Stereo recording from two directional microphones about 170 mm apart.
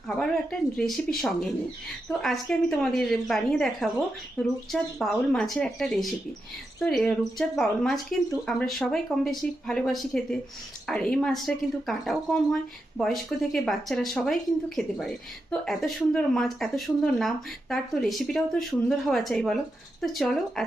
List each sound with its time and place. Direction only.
0.8 s speech: centre (ahead or behind)